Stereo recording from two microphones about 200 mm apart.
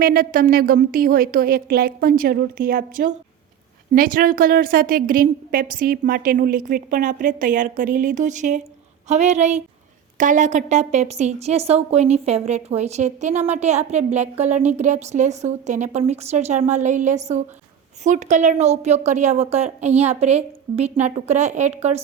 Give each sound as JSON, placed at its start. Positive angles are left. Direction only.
{"t": 0.0, "sound": "a woman's voice", "side_deg": -45}